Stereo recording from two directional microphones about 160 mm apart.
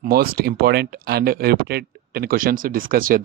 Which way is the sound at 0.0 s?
70° right (ahead or behind).